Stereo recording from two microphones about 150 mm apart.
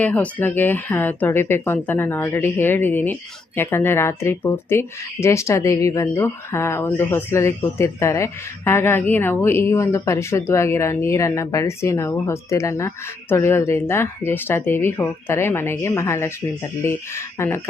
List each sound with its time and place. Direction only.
0.0 s speech: 10° left (ahead or behind)